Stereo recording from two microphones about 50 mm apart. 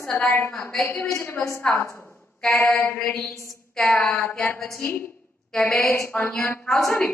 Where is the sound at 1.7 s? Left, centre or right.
Left.